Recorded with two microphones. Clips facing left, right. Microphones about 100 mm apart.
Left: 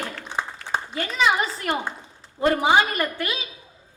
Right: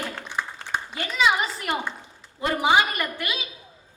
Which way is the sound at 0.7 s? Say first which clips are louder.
Left 2 dB; 35° left (ahead or behind).